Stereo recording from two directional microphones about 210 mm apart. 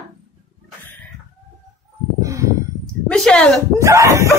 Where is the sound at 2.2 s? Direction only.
15° right (ahead or behind).